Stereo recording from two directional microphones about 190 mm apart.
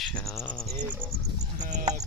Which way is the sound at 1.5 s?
40° right (ahead or behind).